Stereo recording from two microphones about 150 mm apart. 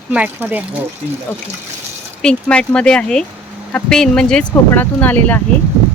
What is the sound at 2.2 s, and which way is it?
Speech, 5° left (ahead or behind).